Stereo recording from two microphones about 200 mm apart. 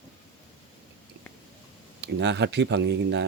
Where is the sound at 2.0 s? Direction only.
60° right (ahead or behind).